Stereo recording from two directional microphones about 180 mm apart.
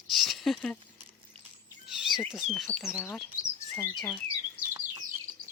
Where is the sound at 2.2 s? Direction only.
Centre (ahead or behind).